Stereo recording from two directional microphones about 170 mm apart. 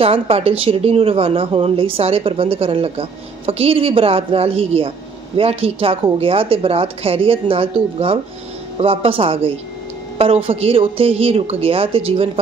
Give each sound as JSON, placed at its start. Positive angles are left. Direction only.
{"t": 0.0, "sound": "speech", "side_deg": -35}